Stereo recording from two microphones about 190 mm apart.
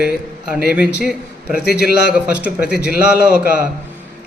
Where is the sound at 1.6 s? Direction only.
55° left (ahead or behind).